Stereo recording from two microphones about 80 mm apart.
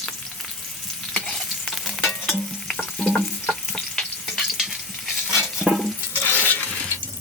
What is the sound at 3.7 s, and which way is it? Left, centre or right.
Frying, centre.